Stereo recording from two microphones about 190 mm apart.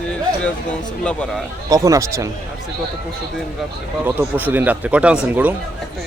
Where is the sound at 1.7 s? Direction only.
15° right (ahead or behind).